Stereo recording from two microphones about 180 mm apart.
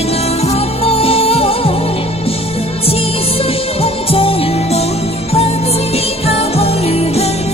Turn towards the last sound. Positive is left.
turn(degrees=35)  # may be behind; listen again after turning